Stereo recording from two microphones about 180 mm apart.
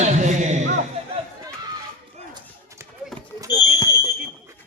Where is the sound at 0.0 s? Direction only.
40° right (ahead or behind).